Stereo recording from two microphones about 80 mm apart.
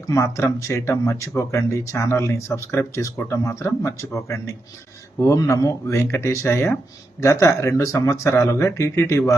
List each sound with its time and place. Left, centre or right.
0.1 s speech: left